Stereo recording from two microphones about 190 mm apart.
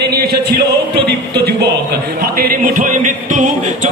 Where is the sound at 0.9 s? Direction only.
60° right (ahead or behind).